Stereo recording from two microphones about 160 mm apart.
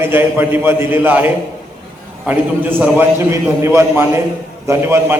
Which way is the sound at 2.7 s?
15° right (ahead or behind).